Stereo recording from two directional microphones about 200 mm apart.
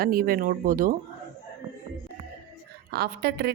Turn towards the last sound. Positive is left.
turn(degrees=-55)  # may be behind; listen again after turning